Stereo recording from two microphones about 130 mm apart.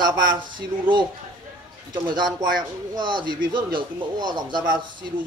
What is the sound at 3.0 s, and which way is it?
Speech, 35° right (ahead or behind).